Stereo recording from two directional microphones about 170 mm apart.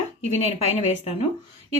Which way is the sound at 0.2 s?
40° left (ahead or behind).